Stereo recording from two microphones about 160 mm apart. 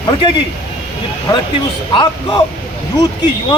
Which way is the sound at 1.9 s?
30° left (ahead or behind).